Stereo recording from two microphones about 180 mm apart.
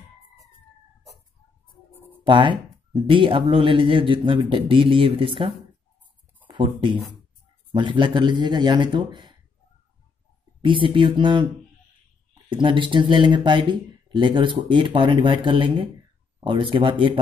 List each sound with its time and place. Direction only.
2.2 s speech: 25° right (ahead or behind)
10.6 s speech: 30° right (ahead or behind)
12.4 s speech: 25° right (ahead or behind)